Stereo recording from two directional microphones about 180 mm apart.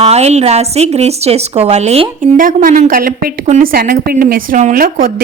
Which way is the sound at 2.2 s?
50° right (ahead or behind).